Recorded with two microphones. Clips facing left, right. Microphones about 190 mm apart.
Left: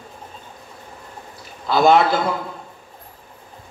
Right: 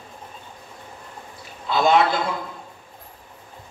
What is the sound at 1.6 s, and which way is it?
Speech, 40° left (ahead or behind).